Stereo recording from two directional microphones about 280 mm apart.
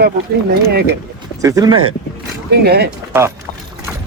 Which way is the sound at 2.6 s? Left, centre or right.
Right.